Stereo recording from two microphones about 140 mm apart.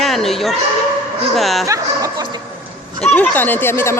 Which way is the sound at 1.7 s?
25° right (ahead or behind).